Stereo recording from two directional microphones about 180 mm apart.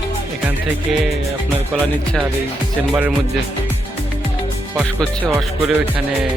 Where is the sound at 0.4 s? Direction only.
Centre (ahead or behind).